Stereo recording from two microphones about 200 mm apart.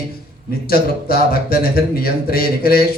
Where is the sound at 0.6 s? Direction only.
50° left (ahead or behind).